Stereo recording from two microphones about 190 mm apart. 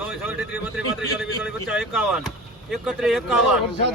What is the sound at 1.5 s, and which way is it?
Speech, centre (ahead or behind).